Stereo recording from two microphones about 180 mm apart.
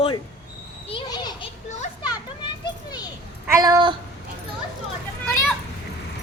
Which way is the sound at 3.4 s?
20° right (ahead or behind).